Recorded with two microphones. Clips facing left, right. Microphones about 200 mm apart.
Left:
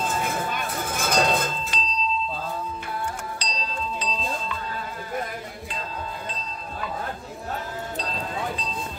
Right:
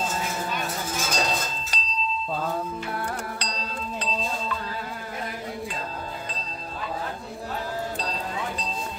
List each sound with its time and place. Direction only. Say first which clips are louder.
0.0 s chink: left 2 dB; 55° left (ahead or behind)
1.7 s a sound: left 5 dB; 40° right (ahead or behind)
3.3 s music: left 1 dB; 60° right (ahead or behind)